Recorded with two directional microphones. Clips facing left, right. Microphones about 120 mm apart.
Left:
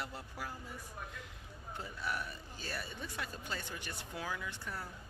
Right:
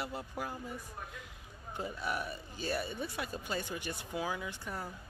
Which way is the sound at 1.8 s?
15° right (ahead or behind).